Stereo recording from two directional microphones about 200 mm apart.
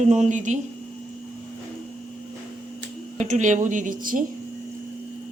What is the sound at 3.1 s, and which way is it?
Speech, 35° right (ahead or behind).